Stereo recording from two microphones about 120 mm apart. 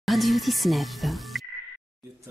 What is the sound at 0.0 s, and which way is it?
Speech, centre (ahead or behind).